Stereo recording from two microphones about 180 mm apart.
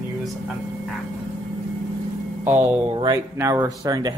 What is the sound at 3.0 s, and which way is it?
Speech, 20° right (ahead or behind).